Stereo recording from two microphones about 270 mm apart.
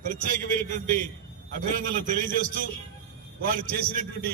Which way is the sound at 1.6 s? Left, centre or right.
Right.